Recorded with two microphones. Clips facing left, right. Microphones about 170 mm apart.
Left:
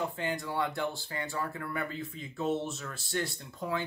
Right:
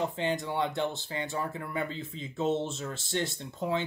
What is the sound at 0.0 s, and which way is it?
Speech, 25° right (ahead or behind).